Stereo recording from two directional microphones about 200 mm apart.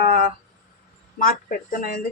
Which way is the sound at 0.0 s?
50° left (ahead or behind).